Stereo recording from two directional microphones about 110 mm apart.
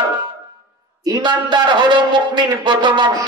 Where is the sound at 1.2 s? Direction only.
45° right (ahead or behind).